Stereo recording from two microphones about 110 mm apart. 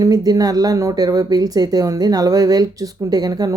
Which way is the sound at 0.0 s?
35° right (ahead or behind).